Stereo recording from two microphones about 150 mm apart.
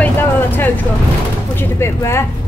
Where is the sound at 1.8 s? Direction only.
20° left (ahead or behind).